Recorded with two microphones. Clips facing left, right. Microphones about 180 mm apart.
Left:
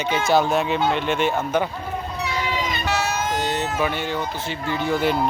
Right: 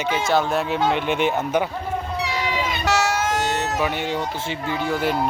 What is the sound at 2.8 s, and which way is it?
Vehicle, 90° right.